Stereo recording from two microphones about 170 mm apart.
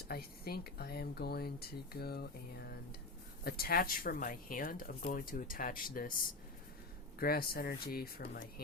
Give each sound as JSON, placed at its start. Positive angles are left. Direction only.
{"t": 0.1, "sound": "speech", "side_deg": 65}
{"t": 7.2, "sound": "speech", "side_deg": 60}